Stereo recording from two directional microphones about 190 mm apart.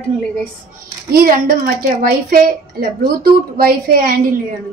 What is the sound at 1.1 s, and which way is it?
A woman's voice, 50° right (ahead or behind).